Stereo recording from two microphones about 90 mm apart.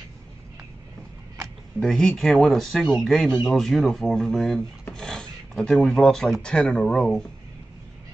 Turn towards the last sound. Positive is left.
turn(degrees=5)  # may be behind; listen again after turning